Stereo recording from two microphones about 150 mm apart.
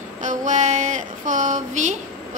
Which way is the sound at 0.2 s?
55° right (ahead or behind).